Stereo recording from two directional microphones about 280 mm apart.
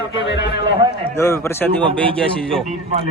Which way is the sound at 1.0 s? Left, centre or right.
Centre.